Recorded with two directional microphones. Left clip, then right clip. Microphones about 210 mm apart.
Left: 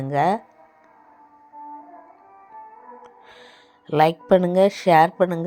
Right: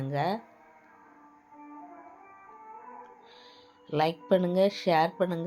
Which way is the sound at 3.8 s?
30° left (ahead or behind).